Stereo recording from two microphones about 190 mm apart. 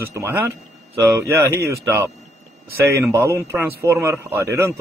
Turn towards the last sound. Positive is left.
turn(degrees=-15)  # may be behind; listen again after turning